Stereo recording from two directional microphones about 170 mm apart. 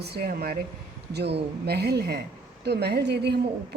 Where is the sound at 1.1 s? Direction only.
75° right (ahead or behind).